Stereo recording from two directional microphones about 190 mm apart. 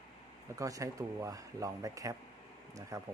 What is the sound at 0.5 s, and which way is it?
Speech, 15° right (ahead or behind).